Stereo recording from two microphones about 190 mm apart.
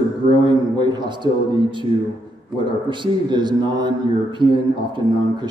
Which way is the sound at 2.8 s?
25° right (ahead or behind).